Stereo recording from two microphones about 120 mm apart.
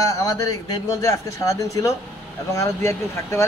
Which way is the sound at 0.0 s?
30° left (ahead or behind).